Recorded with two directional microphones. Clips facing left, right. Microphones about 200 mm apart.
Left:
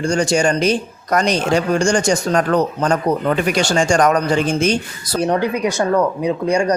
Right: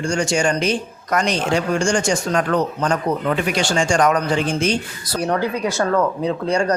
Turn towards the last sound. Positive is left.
turn(degrees=15)  # may be behind; listen again after turning